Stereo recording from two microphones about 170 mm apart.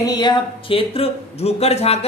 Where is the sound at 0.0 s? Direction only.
25° left (ahead or behind).